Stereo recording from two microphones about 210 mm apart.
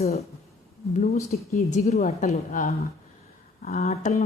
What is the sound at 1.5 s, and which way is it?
A woman's voice, 30° left (ahead or behind).